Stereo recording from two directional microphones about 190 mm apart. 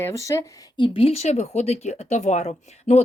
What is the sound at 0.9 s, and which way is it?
Speech, 30° left (ahead or behind).